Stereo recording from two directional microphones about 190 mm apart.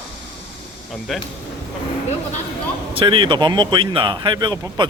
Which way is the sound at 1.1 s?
Centre (ahead or behind).